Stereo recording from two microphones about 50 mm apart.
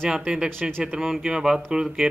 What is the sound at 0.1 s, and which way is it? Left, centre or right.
Speech, centre.